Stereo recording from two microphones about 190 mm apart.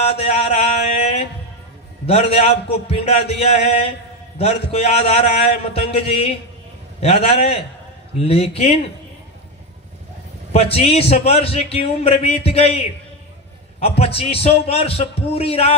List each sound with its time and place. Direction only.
0.0 s a sound: 30° left (ahead or behind)
2.0 s a man's voice: 35° left (ahead or behind)
10.5 s a man's voice: 30° left (ahead or behind)